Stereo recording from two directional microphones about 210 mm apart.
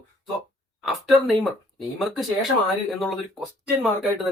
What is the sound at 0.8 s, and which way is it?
Speech, centre (ahead or behind).